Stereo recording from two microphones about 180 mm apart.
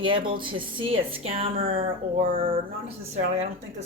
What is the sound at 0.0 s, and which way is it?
A woman's voice, 30° right (ahead or behind).